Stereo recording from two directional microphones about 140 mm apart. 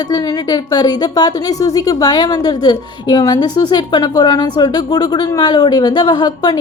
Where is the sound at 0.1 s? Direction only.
30° left (ahead or behind).